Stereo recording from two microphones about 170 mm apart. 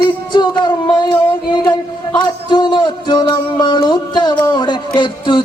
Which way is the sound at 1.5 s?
25° left (ahead or behind).